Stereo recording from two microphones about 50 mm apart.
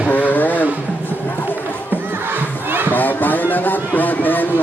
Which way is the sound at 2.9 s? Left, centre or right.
Left.